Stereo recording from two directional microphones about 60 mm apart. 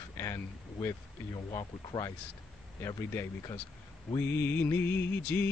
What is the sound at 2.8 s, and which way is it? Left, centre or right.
Music, left.